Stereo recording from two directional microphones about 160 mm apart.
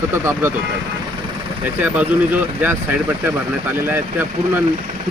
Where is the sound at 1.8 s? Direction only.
10° right (ahead or behind).